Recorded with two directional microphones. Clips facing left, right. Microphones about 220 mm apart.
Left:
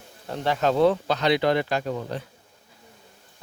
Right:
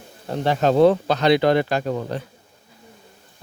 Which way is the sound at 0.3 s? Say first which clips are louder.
Right 4 dB; 30° right (ahead or behind).